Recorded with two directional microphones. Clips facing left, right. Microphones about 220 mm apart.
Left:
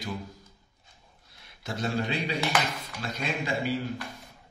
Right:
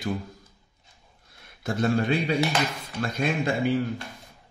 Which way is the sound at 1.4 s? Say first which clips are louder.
Right 7 dB; 50° right (ahead or behind).